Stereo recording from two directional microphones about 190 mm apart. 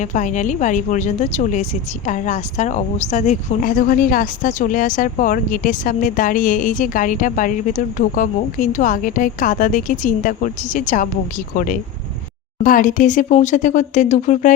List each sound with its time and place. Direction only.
0.0 s a woman's voice: 40° left (ahead or behind)